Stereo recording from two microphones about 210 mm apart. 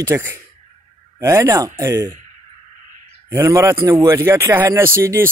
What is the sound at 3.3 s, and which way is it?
Speech, 15° right (ahead or behind).